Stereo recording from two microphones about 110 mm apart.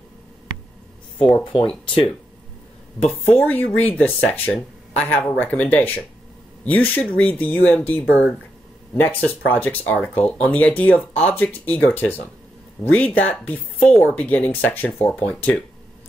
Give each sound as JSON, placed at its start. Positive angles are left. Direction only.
{"t": 1.1, "sound": "speech", "side_deg": 50}
{"t": 3.3, "sound": "speech", "side_deg": 15}